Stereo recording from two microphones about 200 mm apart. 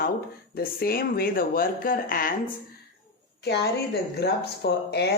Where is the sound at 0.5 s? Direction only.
50° left (ahead or behind).